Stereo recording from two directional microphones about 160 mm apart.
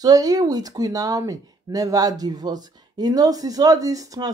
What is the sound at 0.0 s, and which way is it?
Speech, 20° right (ahead or behind).